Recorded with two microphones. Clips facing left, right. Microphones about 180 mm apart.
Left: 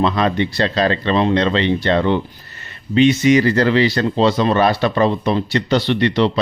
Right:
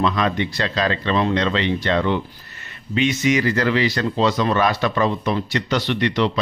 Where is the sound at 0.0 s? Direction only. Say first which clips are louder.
Left 3 dB; 30° left (ahead or behind).